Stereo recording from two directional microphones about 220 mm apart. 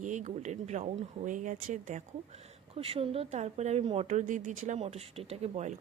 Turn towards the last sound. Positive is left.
turn(degrees=-30)  # may be behind; listen again after turning